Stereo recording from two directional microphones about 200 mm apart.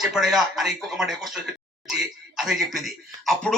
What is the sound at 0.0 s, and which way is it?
A man's voice, centre (ahead or behind).